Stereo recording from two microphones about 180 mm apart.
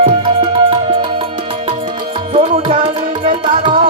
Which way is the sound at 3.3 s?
30° right (ahead or behind).